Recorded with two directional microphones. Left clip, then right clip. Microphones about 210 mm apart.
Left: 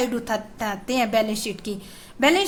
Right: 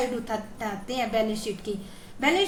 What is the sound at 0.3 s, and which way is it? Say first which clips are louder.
A woman's voice: left 5 dB; 45° left (ahead or behind).